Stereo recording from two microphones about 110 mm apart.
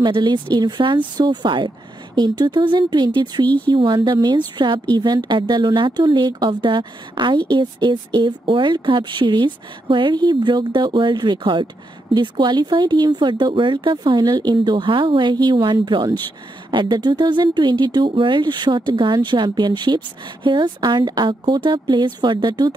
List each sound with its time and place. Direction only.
0.0 s speech: 40° right (ahead or behind)